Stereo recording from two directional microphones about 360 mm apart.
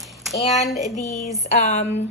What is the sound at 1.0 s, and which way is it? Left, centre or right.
A woman's voice, centre.